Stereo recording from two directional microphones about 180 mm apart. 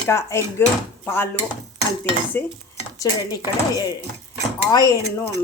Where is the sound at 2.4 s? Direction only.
10° left (ahead or behind).